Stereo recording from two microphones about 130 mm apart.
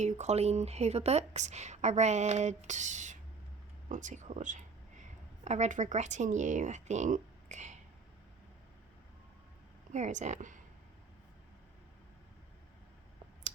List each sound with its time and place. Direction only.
0.0 s a woman's voice: 65° right (ahead or behind)
3.8 s a sound: 70° right (ahead or behind)
5.5 s speech: 70° right (ahead or behind)
9.9 s speech: 65° right (ahead or behind)